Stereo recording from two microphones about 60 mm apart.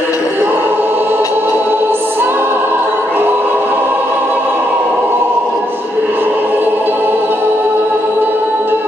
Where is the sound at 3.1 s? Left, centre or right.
Right.